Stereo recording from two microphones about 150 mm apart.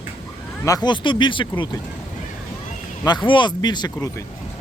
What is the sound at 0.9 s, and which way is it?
Speech, 30° left (ahead or behind).